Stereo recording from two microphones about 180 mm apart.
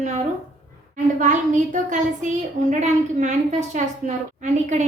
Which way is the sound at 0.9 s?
45° right (ahead or behind).